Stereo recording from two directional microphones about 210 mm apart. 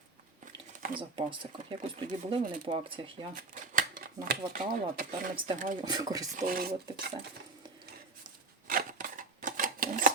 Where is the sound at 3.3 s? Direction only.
40° right (ahead or behind).